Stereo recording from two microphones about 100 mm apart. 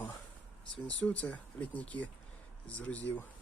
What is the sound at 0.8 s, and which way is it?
Speech, 15° left (ahead or behind).